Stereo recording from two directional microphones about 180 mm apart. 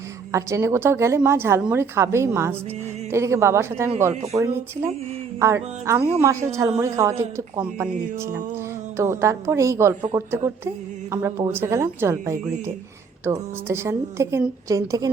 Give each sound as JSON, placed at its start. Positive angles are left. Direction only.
{"t": 0.3, "sound": "a woman's voice", "side_deg": -15}